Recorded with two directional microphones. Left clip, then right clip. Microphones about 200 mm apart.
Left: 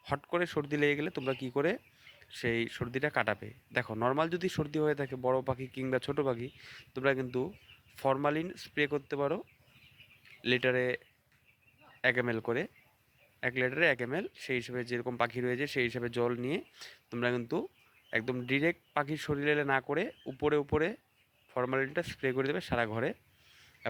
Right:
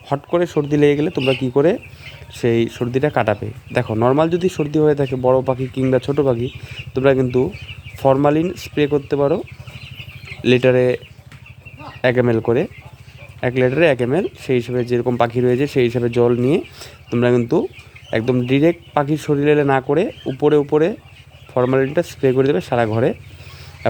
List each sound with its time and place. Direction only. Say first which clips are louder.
0.1 s speech: right 14 dB; 15° left (ahead or behind)
5.5 s speech: right 16 dB; 10° left (ahead or behind)
12.0 s speech: right 14 dB; 10° left (ahead or behind)
13.4 s speech: right 14 dB; 10° left (ahead or behind)